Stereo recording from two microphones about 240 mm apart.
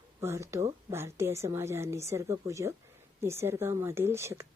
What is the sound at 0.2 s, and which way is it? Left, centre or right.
A woman's voice, centre.